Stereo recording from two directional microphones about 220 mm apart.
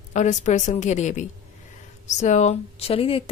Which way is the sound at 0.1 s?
35° left (ahead or behind).